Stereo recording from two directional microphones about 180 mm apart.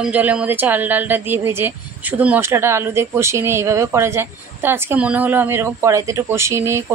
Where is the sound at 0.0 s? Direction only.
5° right (ahead or behind).